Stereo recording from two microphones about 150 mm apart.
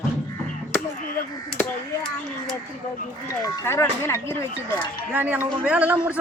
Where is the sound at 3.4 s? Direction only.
20° left (ahead or behind).